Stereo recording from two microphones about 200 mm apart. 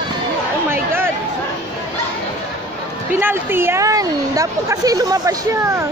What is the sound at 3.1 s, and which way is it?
A woman's voice, 10° right (ahead or behind).